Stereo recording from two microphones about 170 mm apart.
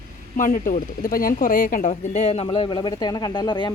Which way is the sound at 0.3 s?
50° left (ahead or behind).